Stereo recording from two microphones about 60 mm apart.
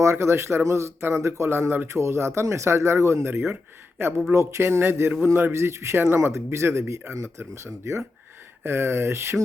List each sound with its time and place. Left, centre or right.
0.0 s speech: right
3.5 s speech: right
4.4 s speech: right